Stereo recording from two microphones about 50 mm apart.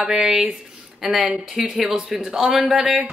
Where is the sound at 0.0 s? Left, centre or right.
Centre.